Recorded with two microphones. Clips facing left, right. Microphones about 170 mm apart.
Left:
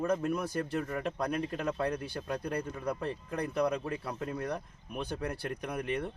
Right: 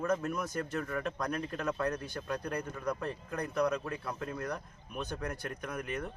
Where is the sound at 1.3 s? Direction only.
15° left (ahead or behind).